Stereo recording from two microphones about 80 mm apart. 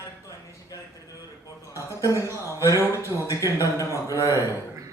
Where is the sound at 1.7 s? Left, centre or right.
Left.